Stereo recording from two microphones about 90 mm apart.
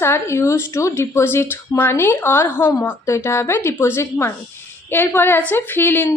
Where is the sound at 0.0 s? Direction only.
30° left (ahead or behind).